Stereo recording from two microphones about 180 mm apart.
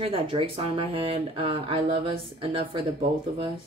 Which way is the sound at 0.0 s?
30° right (ahead or behind).